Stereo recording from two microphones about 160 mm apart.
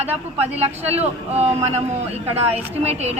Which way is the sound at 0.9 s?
40° right (ahead or behind).